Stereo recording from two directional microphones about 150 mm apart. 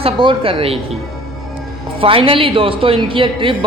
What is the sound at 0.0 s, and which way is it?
Speech, 35° right (ahead or behind).